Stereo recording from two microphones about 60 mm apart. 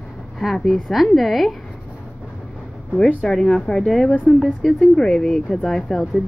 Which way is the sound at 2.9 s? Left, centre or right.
Centre.